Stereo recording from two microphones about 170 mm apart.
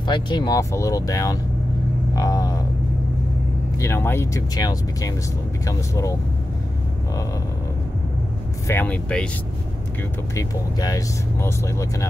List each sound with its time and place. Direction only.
0.0 s speech: 25° left (ahead or behind)
2.1 s a sound: 20° left (ahead or behind)
3.8 s speech: 15° left (ahead or behind)
8.6 s speech: 10° left (ahead or behind)
10.3 s speech: 20° left (ahead or behind)